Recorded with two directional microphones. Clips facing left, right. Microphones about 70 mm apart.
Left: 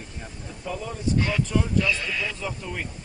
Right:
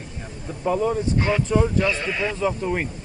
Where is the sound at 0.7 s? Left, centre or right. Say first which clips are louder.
Right 8 dB; right.